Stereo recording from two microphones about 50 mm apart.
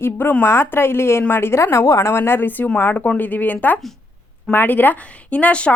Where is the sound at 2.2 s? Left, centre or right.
Left.